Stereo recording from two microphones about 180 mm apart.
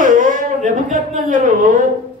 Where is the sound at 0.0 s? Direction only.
45° right (ahead or behind).